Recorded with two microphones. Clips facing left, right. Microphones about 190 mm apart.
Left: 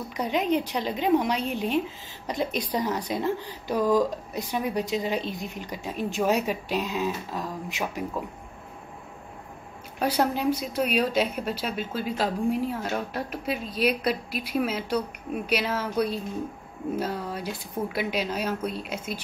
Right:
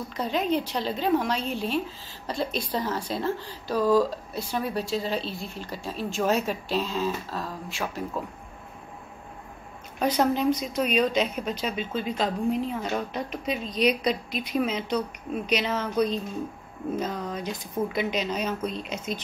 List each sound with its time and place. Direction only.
0.1 s a woman's voice: 15° left (ahead or behind)
9.9 s a woman's voice: 10° left (ahead or behind)